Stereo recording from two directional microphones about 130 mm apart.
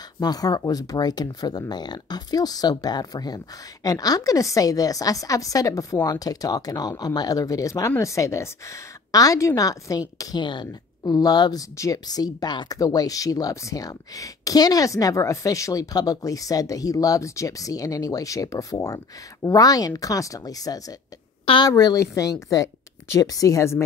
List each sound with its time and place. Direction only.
0.2 s a woman's voice: 30° left (ahead or behind)